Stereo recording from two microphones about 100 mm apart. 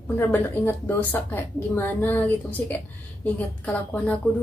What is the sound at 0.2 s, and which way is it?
A woman's voice, 20° left (ahead or behind).